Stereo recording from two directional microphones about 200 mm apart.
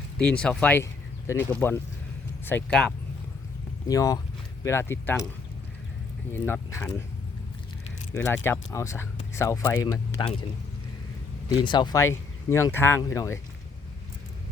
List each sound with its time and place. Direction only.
0.2 s speech: 5° left (ahead or behind)
3.8 s speech: 15° left (ahead or behind)
6.3 s speech: 10° left (ahead or behind)
8.1 s speech: 10° left (ahead or behind)
11.4 s speech: 25° left (ahead or behind)